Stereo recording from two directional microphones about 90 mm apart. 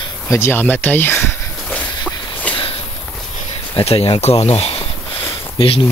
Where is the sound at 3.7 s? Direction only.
90° left.